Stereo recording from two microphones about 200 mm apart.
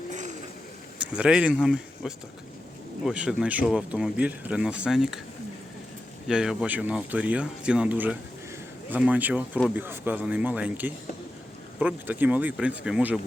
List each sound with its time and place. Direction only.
0.1 s a sound: 35° right (ahead or behind)
1.0 s speech: 5° right (ahead or behind)
6.2 s speech: centre (ahead or behind)